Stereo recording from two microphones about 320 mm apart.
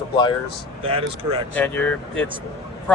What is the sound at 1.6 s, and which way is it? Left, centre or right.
Speech, centre.